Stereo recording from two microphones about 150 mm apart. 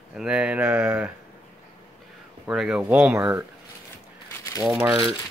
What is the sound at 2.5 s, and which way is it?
Speech, 5° right (ahead or behind).